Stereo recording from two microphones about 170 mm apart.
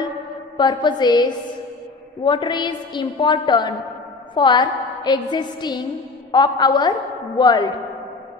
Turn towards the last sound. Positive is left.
turn(degrees=25)  # may be behind; listen again after turning